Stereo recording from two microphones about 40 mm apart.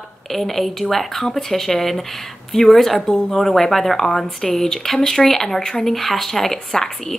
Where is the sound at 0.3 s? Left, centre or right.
Centre.